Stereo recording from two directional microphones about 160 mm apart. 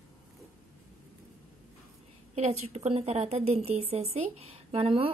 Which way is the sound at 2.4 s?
40° right (ahead or behind).